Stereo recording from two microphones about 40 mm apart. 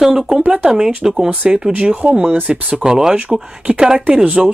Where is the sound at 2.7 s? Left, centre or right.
Centre.